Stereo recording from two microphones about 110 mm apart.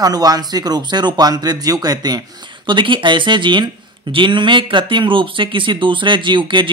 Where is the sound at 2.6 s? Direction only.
45° right (ahead or behind).